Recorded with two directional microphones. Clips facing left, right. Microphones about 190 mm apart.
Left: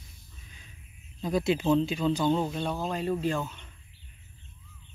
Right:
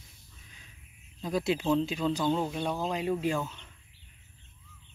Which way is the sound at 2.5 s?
15° right (ahead or behind).